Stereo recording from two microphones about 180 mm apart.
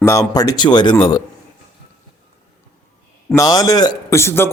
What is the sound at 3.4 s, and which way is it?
A man's voice, 20° left (ahead or behind).